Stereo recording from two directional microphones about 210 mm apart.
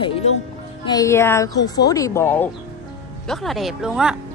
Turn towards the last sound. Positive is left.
turn(degrees=-5)  # may be behind; listen again after turning